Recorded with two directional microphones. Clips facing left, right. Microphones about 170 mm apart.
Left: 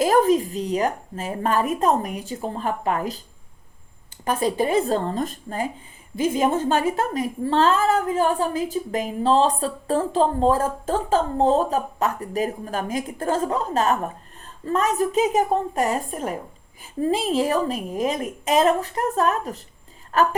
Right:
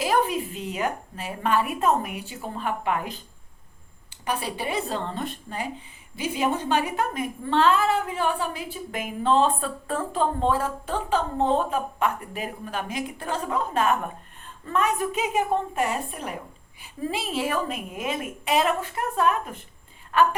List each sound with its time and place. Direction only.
0.0 s a woman's voice: 45° left (ahead or behind)
4.3 s a woman's voice: 45° left (ahead or behind)